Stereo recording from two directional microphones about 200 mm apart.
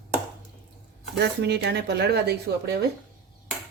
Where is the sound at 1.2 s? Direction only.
55° right (ahead or behind).